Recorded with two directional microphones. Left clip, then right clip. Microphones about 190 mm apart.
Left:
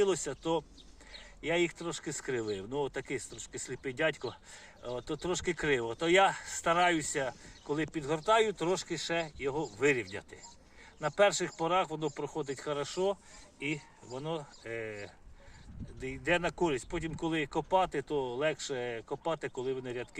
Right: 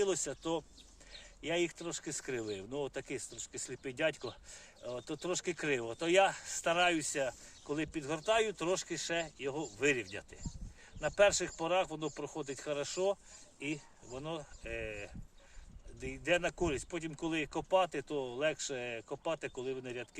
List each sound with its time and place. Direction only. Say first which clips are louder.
0.1 s speech: left 4 dB; 20° right (ahead or behind)
13.7 s speech: left 4 dB; 45° right (ahead or behind)
14.6 s speech: left 2 dB; 30° right (ahead or behind)